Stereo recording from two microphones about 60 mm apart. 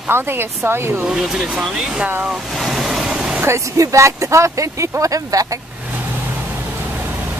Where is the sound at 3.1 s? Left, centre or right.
Centre.